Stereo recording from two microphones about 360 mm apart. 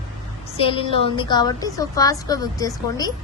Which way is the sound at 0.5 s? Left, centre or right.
Centre.